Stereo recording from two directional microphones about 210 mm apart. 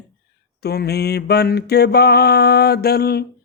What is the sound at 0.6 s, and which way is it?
Mantra, 50° left (ahead or behind).